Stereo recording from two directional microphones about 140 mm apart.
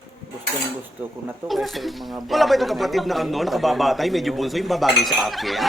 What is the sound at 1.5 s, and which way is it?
Speech, centre (ahead or behind).